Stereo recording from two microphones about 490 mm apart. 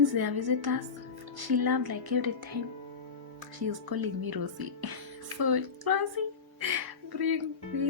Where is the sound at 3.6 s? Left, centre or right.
Right.